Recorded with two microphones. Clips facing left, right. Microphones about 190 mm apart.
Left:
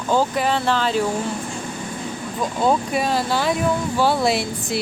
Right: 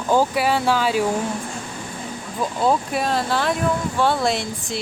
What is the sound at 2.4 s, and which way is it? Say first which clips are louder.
Speech: even; centre (ahead or behind).